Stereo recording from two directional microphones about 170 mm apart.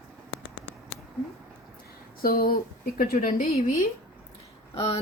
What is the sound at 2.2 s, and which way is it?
Speech, 60° left (ahead or behind).